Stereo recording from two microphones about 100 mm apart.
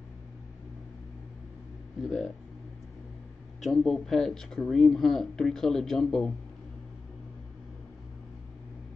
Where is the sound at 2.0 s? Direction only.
5° left (ahead or behind).